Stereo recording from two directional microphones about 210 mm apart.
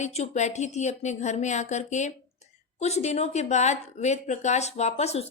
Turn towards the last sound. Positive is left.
turn(degrees=30)  # may be behind; listen again after turning